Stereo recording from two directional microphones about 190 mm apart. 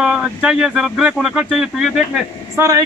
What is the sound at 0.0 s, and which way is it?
Speech, 5° right (ahead or behind).